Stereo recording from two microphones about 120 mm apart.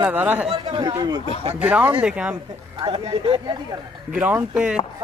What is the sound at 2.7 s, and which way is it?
Speech, 45° right (ahead or behind).